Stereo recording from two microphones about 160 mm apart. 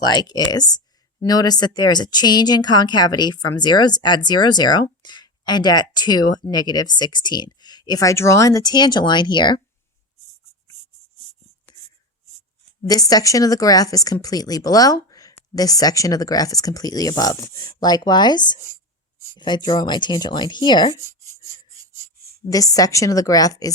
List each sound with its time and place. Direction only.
0.1 s a woman's voice: 25° left (ahead or behind)
12.9 s a woman's voice: 25° left (ahead or behind)
22.4 s a woman's voice: 20° left (ahead or behind)